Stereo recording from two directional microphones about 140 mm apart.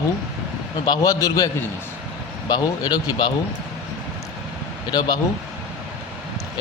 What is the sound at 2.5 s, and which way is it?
Speech, 30° left (ahead or behind).